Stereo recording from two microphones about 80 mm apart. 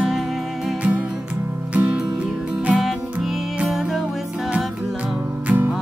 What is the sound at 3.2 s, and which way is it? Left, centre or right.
Music, centre.